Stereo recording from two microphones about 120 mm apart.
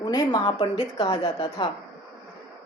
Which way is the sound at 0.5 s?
50° left (ahead or behind).